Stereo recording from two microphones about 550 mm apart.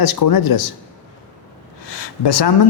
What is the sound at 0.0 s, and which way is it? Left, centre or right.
Speech, left.